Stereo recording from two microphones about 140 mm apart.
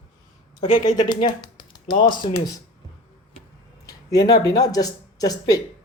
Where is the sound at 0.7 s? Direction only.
30° left (ahead or behind).